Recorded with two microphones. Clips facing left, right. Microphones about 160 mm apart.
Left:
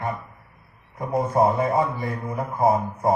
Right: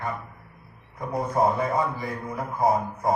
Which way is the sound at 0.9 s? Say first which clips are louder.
Left 4 dB; 25° left (ahead or behind).